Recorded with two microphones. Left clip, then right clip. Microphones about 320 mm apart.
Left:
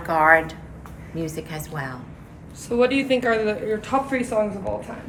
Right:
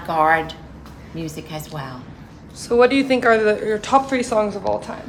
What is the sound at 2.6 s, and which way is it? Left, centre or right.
Speech, right.